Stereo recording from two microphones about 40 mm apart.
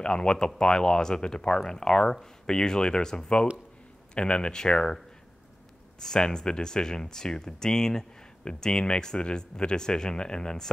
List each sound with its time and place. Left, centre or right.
0.0 s speech: left
5.9 s speech: centre